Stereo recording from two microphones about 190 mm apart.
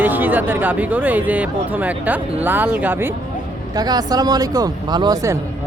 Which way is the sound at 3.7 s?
20° right (ahead or behind).